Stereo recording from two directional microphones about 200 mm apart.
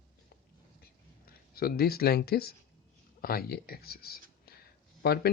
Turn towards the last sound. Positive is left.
turn(degrees=50)  # may be behind; listen again after turning